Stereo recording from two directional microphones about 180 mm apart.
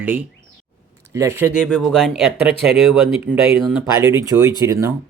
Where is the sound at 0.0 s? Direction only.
10° right (ahead or behind).